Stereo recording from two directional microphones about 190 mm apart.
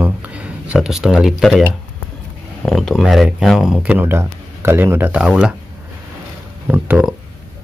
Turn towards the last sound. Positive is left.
turn(degrees=-5)  # may be behind; listen again after turning